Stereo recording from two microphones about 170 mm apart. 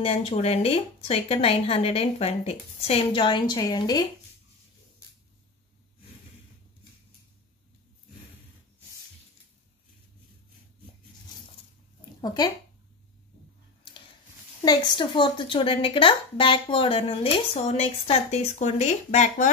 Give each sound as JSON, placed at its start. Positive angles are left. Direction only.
{"t": 0.0, "sound": "speech", "side_deg": 35}
{"t": 14.6, "sound": "speech", "side_deg": 25}